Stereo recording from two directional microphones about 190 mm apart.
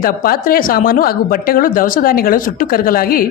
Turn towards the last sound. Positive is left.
turn(degrees=50)  # may be behind; listen again after turning